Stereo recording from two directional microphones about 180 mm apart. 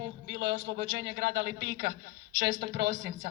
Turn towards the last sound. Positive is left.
turn(degrees=-75)  # may be behind; listen again after turning